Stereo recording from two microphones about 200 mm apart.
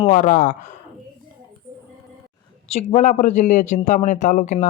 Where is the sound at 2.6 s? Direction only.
30° left (ahead or behind).